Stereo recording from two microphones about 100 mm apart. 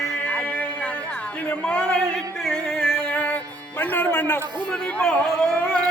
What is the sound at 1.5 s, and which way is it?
Music, 15° left (ahead or behind).